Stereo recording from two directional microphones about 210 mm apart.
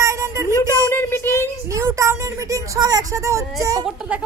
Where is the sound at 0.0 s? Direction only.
15° right (ahead or behind).